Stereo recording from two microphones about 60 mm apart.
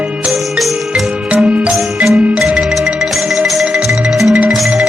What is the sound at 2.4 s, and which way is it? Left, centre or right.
Music, centre.